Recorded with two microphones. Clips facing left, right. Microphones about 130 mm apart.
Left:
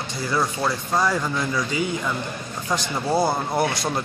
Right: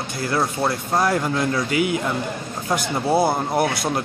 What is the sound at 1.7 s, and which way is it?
Speech, 65° right (ahead or behind).